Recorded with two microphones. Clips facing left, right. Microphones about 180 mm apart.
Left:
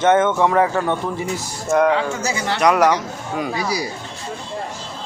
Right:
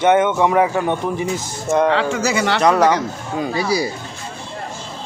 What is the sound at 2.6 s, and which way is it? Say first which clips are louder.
Speech: even; 30° right (ahead or behind).